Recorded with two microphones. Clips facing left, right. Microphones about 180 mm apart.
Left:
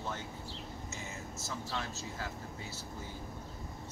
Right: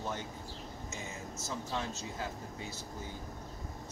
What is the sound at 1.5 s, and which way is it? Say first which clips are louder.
Speech: right 3 dB; 20° right (ahead or behind).